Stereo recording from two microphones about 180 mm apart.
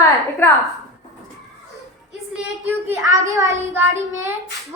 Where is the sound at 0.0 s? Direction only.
15° left (ahead or behind).